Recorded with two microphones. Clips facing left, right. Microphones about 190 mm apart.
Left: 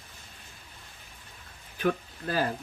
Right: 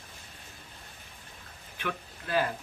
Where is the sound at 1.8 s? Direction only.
40° left (ahead or behind).